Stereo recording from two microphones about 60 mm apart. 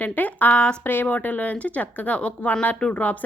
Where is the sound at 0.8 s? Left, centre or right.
Left.